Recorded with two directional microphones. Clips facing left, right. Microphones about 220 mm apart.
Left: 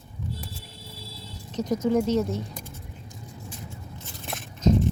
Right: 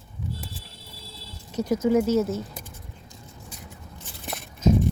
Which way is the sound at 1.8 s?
5° right (ahead or behind).